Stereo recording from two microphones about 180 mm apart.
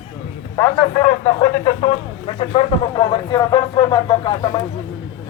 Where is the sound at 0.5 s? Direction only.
20° left (ahead or behind).